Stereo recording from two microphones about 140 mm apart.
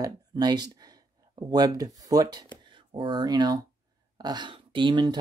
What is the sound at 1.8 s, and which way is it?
Speech, 25° right (ahead or behind).